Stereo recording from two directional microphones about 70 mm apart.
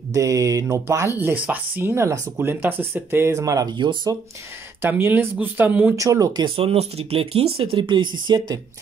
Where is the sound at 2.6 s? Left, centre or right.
Right.